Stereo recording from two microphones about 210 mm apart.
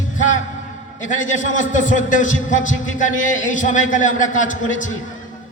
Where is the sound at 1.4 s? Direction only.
40° left (ahead or behind).